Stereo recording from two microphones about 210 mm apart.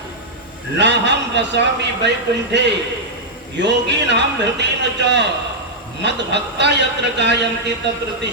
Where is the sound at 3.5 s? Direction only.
55° right (ahead or behind).